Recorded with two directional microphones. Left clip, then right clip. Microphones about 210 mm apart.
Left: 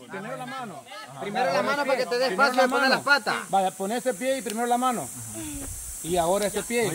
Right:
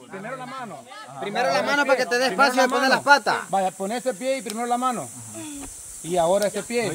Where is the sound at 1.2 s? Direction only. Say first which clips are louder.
Right 2 dB; 50° right (ahead or behind).